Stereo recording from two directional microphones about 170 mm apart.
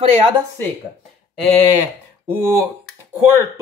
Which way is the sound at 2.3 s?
15° right (ahead or behind).